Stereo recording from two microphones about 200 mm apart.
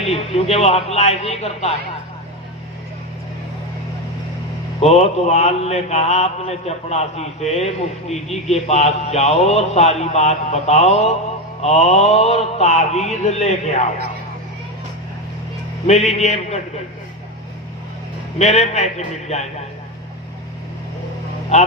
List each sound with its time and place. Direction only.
0.0 s mantra: 30° left (ahead or behind)
4.8 s mantra: 30° left (ahead or behind)
15.9 s mantra: 30° left (ahead or behind)
18.3 s mantra: 35° left (ahead or behind)